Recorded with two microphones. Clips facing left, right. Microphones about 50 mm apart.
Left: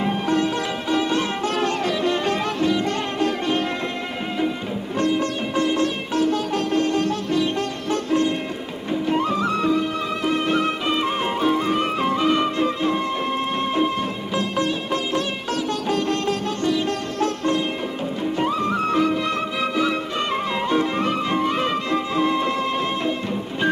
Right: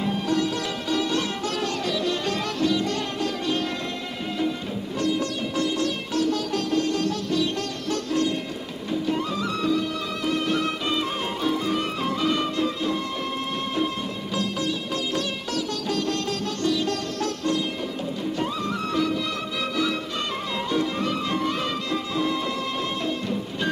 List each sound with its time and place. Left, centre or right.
0.0 s music: left
4.9 s sitar: left
9.1 s music: left
14.3 s music: left